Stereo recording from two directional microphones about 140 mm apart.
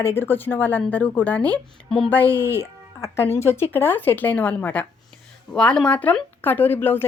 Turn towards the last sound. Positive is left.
turn(degrees=15)  # may be behind; listen again after turning